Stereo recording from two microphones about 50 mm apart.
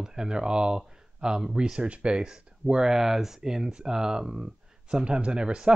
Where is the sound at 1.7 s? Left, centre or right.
Right.